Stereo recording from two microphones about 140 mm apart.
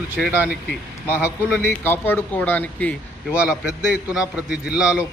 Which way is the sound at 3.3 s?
5° right (ahead or behind).